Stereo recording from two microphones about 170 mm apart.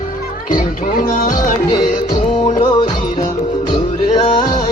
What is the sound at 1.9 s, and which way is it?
Music, 45° left (ahead or behind).